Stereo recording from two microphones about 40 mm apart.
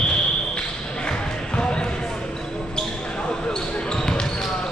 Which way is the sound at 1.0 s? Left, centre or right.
Left.